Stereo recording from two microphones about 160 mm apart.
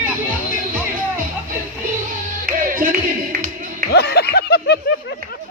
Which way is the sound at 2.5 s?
60° right (ahead or behind).